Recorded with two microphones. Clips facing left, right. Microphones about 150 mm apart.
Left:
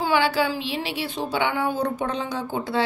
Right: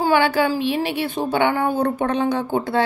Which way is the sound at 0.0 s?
50° right (ahead or behind).